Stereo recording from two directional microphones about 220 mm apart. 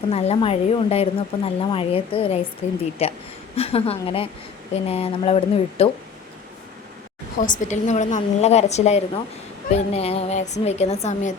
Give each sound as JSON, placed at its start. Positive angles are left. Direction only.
{"t": 0.1, "sound": "a woman's voice", "side_deg": 30}
{"t": 7.3, "sound": "a woman's voice", "side_deg": 35}